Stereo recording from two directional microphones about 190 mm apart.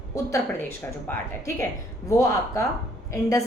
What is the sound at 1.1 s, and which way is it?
Speech, 15° left (ahead or behind).